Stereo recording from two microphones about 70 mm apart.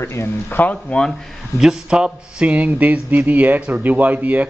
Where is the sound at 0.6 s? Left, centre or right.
Left.